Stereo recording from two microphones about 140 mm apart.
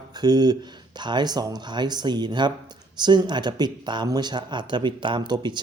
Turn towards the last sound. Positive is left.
turn(degrees=-30)  # may be behind; listen again after turning